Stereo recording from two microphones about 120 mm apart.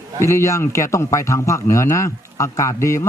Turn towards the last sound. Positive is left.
turn(degrees=25)  # may be behind; listen again after turning